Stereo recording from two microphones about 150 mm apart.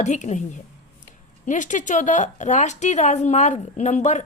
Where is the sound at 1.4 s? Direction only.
55° left (ahead or behind).